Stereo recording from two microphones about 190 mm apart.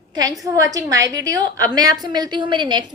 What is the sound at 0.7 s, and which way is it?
A woman's voice, 20° right (ahead or behind).